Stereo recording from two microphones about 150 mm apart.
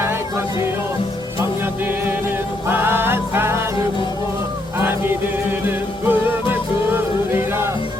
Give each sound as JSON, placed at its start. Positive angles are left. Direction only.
{"t": 0.0, "sound": "music", "side_deg": -15}
{"t": 2.6, "sound": "music", "side_deg": -15}
{"t": 5.6, "sound": "music", "side_deg": -15}